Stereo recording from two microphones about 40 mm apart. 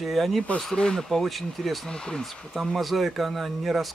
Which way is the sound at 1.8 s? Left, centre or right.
Centre.